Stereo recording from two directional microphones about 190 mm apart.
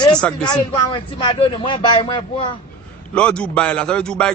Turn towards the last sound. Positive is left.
turn(degrees=5)  # may be behind; listen again after turning